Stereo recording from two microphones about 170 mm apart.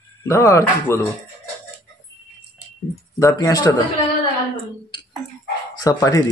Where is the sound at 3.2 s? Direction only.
20° left (ahead or behind).